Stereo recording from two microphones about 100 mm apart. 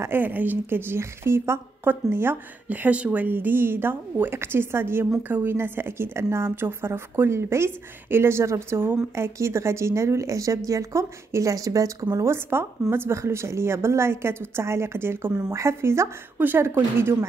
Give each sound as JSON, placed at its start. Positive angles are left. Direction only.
{"t": 0.0, "sound": "speech", "side_deg": -20}